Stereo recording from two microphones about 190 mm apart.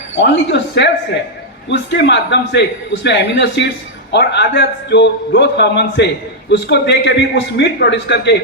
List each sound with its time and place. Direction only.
0.2 s a man's voice: 65° left (ahead or behind)